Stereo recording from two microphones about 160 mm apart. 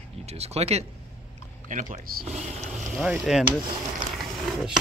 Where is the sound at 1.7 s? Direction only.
50° right (ahead or behind).